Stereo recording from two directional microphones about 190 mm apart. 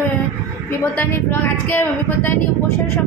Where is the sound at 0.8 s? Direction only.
10° left (ahead or behind).